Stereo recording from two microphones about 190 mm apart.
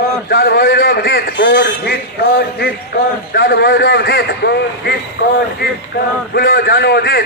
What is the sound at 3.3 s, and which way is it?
A man's voice, 60° left (ahead or behind).